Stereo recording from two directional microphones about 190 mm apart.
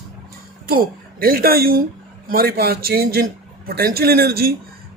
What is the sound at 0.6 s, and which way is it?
A man's voice, 50° right (ahead or behind).